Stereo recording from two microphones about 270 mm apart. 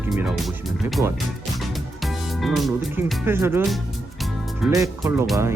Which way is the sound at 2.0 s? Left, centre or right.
Centre.